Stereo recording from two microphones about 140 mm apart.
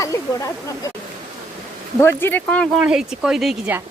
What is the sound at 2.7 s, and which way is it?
Speech, 5° right (ahead or behind).